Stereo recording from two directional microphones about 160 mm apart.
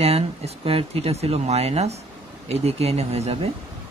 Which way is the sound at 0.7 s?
40° right (ahead or behind).